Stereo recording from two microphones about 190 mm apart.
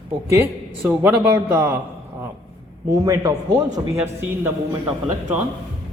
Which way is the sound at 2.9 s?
15° right (ahead or behind).